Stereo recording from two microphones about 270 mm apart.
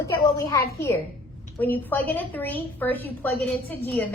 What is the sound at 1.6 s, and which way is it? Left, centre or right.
A woman's voice, centre.